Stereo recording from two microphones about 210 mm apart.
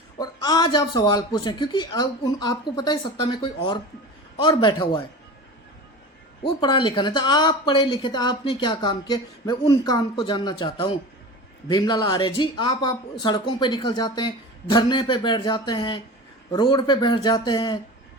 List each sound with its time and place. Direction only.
0.2 s speech: 20° left (ahead or behind)
6.4 s speech: 20° left (ahead or behind)